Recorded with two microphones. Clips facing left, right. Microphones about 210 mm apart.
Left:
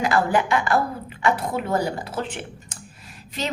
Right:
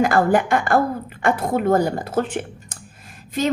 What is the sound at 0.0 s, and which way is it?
A woman's voice, 50° right (ahead or behind).